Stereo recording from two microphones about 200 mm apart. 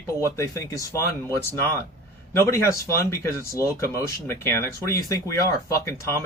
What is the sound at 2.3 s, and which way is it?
Speech, 15° left (ahead or behind).